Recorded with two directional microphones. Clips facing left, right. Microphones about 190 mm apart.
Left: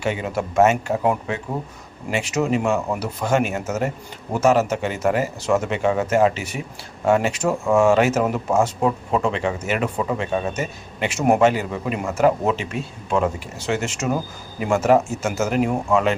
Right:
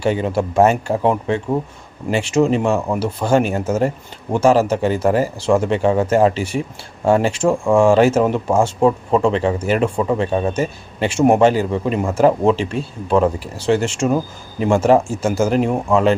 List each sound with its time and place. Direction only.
0.0 s speech: 30° right (ahead or behind)